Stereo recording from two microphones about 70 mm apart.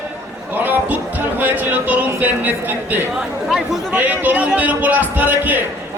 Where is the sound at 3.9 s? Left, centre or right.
Right.